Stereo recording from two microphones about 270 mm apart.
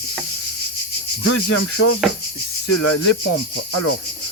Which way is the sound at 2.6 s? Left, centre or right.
Left.